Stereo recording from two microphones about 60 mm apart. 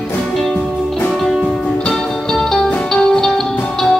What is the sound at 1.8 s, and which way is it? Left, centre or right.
Music, centre.